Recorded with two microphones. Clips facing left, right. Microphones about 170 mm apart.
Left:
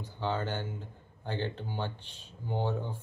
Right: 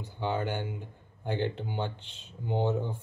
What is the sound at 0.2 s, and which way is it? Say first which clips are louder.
A man's voice: right 2 dB; 15° right (ahead or behind).